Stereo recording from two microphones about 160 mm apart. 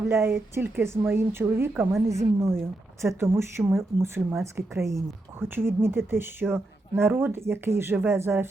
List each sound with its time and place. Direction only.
0.0 s speech: 15° right (ahead or behind)